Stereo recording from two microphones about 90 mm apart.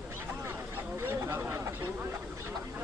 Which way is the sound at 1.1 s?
25° right (ahead or behind).